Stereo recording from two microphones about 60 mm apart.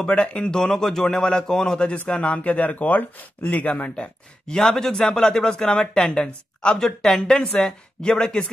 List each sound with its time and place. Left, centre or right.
0.0 s speech: centre
4.6 s speech: centre